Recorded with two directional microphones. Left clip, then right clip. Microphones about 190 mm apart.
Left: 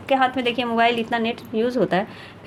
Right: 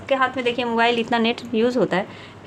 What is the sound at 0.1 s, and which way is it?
Speech, 15° left (ahead or behind).